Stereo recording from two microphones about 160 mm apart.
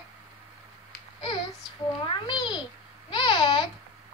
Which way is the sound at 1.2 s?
30° left (ahead or behind).